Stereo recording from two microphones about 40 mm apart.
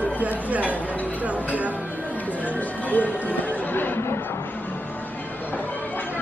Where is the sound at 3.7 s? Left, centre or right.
Left.